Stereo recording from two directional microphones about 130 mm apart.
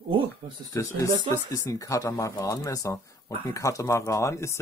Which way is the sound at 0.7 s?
25° left (ahead or behind).